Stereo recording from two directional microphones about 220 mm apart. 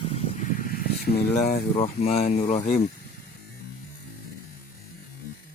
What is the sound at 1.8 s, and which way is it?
Speech, 25° left (ahead or behind).